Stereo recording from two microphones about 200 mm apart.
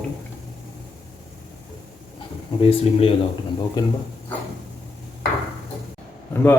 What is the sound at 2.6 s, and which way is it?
A man's voice, 30° left (ahead or behind).